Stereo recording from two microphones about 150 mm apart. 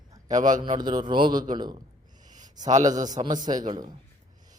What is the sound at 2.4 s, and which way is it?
Speech, 55° right (ahead or behind).